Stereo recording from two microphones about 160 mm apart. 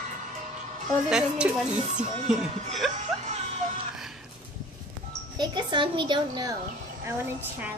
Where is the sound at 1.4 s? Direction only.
10° right (ahead or behind).